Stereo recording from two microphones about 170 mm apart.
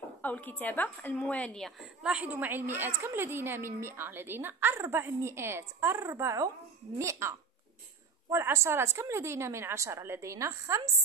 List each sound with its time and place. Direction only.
0.2 s a woman's voice: 10° left (ahead or behind); by 10.8 s 15° right (ahead or behind)